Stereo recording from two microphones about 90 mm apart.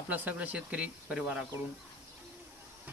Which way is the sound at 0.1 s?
20° right (ahead or behind).